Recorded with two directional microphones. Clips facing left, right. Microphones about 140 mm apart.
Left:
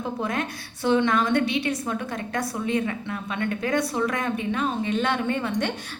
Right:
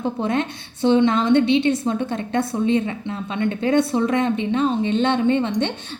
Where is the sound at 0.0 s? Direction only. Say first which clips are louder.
Right 6 dB; 25° right (ahead or behind).